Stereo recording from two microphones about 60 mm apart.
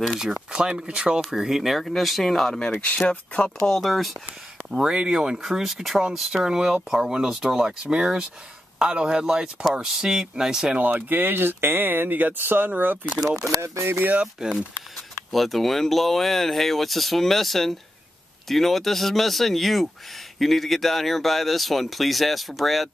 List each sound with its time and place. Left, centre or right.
0.0 s speech: centre
0.5 s speech: centre
1.3 s speech: centre
3.1 s speech: centre
3.6 s speech: centre
4.6 s speech: centre
10.8 s speech: right
13.6 s speech: right
14.1 s speech: centre
15.3 s speech: centre